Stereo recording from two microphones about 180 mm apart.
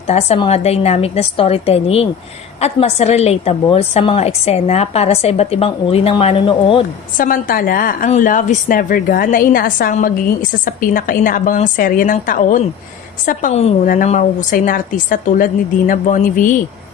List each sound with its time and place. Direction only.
0.1 s a woman's voice: 35° left (ahead or behind)
7.2 s a woman's voice: 50° left (ahead or behind)